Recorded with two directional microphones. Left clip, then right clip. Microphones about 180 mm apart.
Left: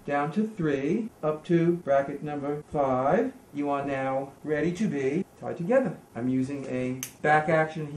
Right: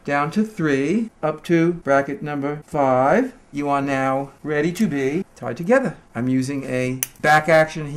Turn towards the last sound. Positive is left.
turn(degrees=-35)  # may be behind; listen again after turning